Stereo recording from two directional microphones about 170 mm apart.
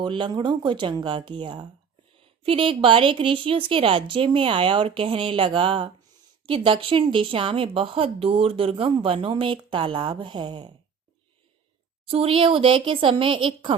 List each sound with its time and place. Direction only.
0.0 s speech: 30° right (ahead or behind)
12.0 s speech: 35° right (ahead or behind)